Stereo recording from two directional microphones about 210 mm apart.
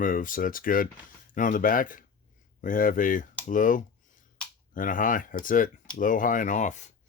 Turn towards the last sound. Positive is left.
turn(degrees=35)  # may be behind; listen again after turning